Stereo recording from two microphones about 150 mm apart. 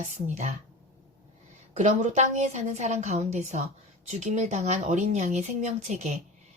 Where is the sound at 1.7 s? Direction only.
50° right (ahead or behind).